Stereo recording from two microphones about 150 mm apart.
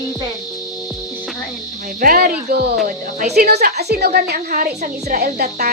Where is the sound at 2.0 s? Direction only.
70° right (ahead or behind).